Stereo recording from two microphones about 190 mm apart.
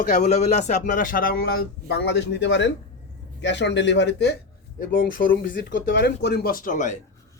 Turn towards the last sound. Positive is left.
turn(degrees=40)  # may be behind; listen again after turning